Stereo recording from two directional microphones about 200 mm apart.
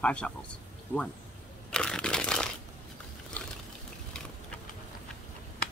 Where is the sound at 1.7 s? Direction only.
5° left (ahead or behind).